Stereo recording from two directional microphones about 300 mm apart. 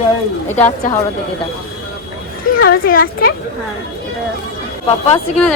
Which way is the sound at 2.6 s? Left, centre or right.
Left.